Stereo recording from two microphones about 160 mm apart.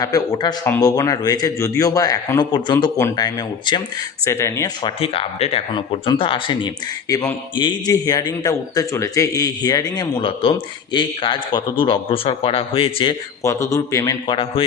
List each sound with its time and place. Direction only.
0.0 s a man's voice: 25° left (ahead or behind)
4.3 s speech: 15° left (ahead or behind)
4.8 s a man's voice: 35° left (ahead or behind)
13.4 s a man's voice: 20° left (ahead or behind)